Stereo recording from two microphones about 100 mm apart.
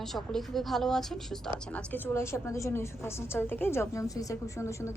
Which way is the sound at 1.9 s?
25° left (ahead or behind).